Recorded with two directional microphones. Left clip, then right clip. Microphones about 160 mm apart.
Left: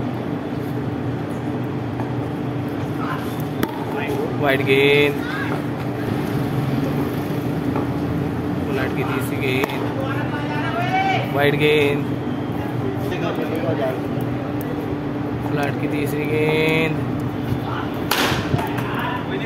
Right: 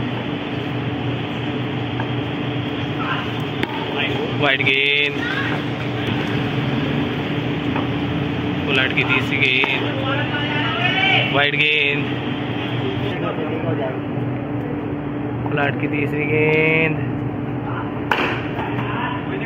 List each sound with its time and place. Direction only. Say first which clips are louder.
4.6 s speech: left 5 dB; 65° left (ahead or behind)
9.4 s speech: right 4 dB; 75° left (ahead or behind)
11.5 s speech: even; 65° left (ahead or behind)
16.3 s mantra: right 3 dB; 15° left (ahead or behind)